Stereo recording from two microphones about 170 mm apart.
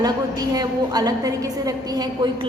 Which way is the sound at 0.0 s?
20° right (ahead or behind).